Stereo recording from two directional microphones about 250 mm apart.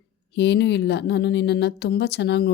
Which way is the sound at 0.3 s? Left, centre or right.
Left.